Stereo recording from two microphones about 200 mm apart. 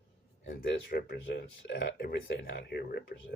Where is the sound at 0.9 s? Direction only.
50° left (ahead or behind).